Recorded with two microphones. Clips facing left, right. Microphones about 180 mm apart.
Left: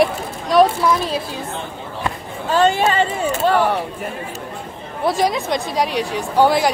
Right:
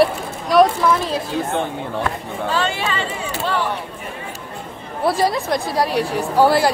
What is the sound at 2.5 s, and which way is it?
Speech, 45° left (ahead or behind).